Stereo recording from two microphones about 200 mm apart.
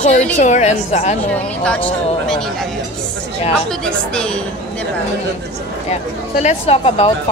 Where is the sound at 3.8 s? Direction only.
5° left (ahead or behind).